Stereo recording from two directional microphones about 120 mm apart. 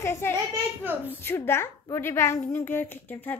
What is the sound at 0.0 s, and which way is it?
A woman's voice, 20° left (ahead or behind).